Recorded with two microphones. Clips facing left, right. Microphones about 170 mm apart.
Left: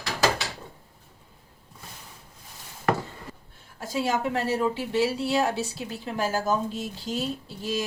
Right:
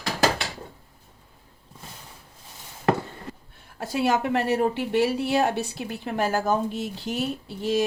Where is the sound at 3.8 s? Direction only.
60° right (ahead or behind).